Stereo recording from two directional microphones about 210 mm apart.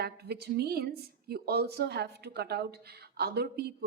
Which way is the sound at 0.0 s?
50° right (ahead or behind).